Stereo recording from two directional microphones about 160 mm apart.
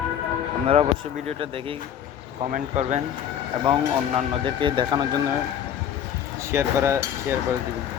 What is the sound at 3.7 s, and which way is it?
Speech, 30° right (ahead or behind).